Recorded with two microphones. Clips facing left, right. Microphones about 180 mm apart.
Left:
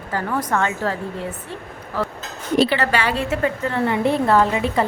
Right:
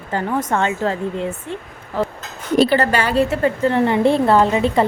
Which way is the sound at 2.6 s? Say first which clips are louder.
Right 3 dB; 45° right (ahead or behind).